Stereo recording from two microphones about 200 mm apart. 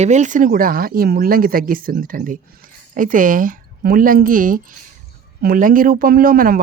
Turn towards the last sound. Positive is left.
turn(degrees=-45)  # may be behind; listen again after turning